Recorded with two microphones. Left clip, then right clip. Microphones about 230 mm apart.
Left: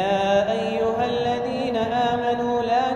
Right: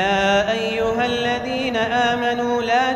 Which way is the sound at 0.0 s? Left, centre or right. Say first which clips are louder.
Right 2 dB; right.